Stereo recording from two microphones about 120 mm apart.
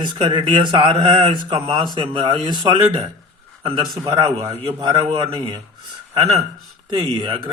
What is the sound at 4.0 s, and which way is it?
Speech, 35° right (ahead or behind).